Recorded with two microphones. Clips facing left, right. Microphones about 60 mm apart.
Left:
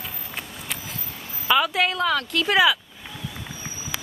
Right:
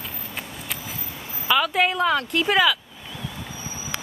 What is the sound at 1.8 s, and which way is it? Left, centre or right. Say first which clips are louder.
Speech: right 2 dB; centre.